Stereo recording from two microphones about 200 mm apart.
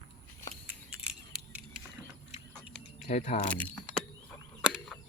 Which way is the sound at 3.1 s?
35° left (ahead or behind).